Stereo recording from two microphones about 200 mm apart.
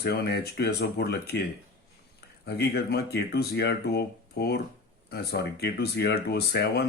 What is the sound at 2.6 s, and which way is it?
Speech, 55° left (ahead or behind).